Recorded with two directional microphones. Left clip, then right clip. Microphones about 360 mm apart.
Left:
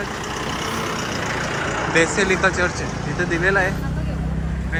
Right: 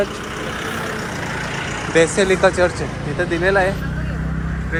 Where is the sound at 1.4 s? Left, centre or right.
Left.